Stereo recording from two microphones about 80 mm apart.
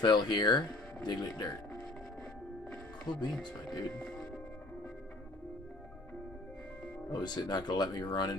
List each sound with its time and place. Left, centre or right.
0.0 s speech: left
3.1 s speech: left
7.1 s speech: left